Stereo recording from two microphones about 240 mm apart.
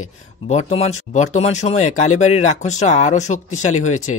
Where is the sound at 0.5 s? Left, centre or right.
Left.